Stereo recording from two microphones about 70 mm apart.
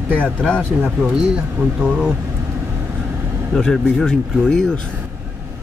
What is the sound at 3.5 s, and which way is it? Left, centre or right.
Speech, centre.